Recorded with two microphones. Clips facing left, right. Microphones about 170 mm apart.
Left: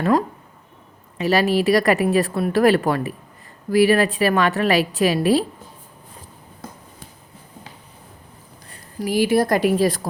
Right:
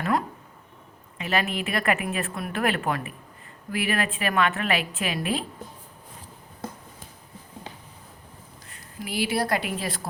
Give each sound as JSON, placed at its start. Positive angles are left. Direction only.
{"t": 1.2, "sound": "speech", "side_deg": 35}
{"t": 8.7, "sound": "a woman's voice", "side_deg": 40}